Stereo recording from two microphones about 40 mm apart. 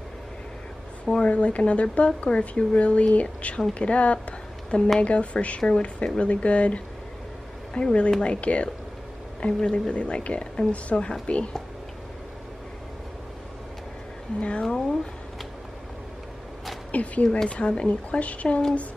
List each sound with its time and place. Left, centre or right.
1.2 s a woman's voice: left
10.7 s a woman's voice: left
14.6 s speech: centre
16.9 s a woman's voice: left